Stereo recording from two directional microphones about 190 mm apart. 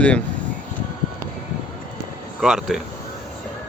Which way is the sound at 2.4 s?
Centre (ahead or behind).